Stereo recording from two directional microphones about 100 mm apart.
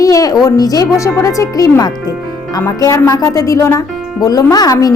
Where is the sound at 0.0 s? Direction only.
35° left (ahead or behind).